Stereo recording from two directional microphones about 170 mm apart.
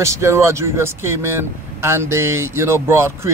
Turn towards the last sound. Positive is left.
turn(degrees=-15)  # may be behind; listen again after turning